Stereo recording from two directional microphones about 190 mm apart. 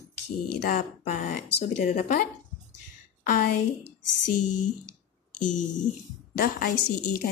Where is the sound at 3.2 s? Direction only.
40° left (ahead or behind).